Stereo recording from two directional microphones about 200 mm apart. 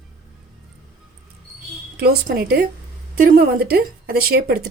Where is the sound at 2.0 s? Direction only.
50° right (ahead or behind).